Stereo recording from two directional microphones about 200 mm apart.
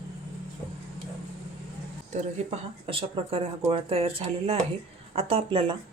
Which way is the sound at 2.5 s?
30° right (ahead or behind).